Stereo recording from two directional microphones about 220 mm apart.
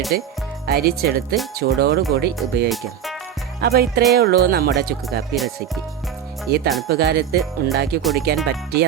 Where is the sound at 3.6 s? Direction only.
45° right (ahead or behind).